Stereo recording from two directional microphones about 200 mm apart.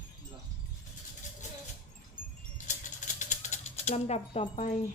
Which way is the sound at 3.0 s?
35° left (ahead or behind).